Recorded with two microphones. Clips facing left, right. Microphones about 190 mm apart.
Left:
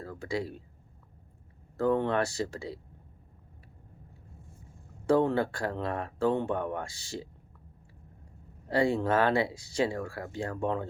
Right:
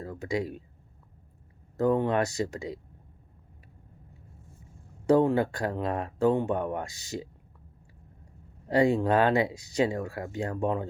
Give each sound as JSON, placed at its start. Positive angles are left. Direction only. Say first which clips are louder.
{"t": 0.0, "sound": "speech", "louder": "right 3 dB", "side_deg": -20}
{"t": 1.7, "sound": "speech", "louder": "right 2 dB", "side_deg": -15}
{"t": 5.0, "sound": "speech", "louder": "right 3 dB", "side_deg": -15}
{"t": 8.7, "sound": "speech", "louder": "right 3 dB", "side_deg": -15}